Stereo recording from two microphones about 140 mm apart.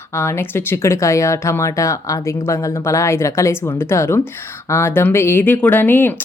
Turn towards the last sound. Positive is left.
turn(degrees=15)  # may be behind; listen again after turning